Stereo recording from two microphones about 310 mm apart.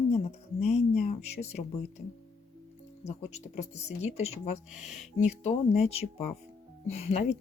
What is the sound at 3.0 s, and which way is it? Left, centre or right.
Speech, left.